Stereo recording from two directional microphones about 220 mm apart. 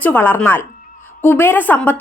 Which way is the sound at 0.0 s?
10° left (ahead or behind).